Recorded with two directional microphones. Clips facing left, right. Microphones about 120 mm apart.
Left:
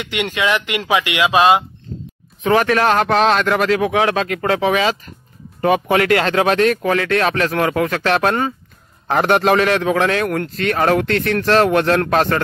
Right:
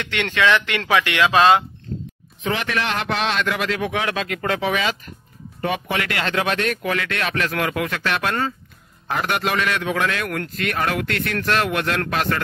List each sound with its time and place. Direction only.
0.0 s speech: 15° left (ahead or behind)
2.4 s speech: 45° left (ahead or behind)